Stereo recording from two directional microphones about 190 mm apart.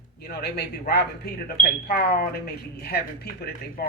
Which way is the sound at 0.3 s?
55° left (ahead or behind).